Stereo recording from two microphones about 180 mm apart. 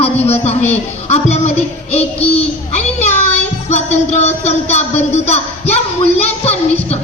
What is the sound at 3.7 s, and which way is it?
Speech, 40° left (ahead or behind).